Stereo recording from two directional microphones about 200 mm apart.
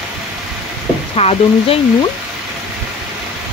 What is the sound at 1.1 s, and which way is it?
Speech, 30° left (ahead or behind).